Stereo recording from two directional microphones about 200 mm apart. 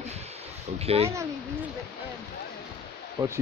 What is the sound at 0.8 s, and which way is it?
Speech, 30° right (ahead or behind).